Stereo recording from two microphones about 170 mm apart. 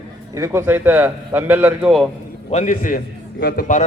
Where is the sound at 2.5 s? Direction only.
50° left (ahead or behind).